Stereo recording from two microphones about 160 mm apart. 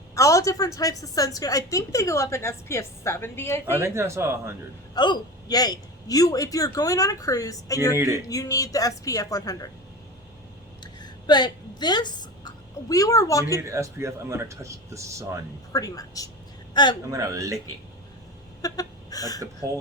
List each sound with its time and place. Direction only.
0.2 s a woman's voice: 20° left (ahead or behind)
3.7 s speech: 15° right (ahead or behind)
4.9 s a woman's voice: 25° left (ahead or behind)
7.9 s speech: 20° right (ahead or behind)
8.3 s a woman's voice: 20° left (ahead or behind)
11.0 s speech: 25° left (ahead or behind)
13.7 s speech: 20° right (ahead or behind)
15.7 s a woman's voice: 20° left (ahead or behind)
17.1 s speech: 20° right (ahead or behind)
18.6 s a sound: 20° left (ahead or behind)